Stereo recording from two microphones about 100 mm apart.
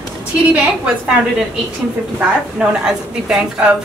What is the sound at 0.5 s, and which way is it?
Speech, 10° right (ahead or behind).